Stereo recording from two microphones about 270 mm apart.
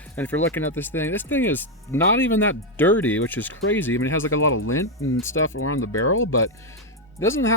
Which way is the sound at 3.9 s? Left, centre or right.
Left.